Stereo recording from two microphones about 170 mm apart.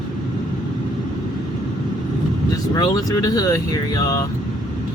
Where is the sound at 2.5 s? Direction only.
20° left (ahead or behind).